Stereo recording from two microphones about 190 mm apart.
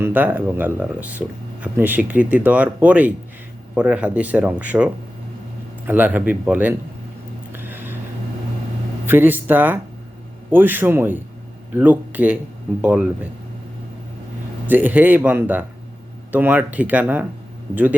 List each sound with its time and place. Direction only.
0.0 s speech: 10° right (ahead or behind)
7.5 s a sound: 10° right (ahead or behind)
9.0 s speech: 10° right (ahead or behind)
14.7 s speech: 10° right (ahead or behind)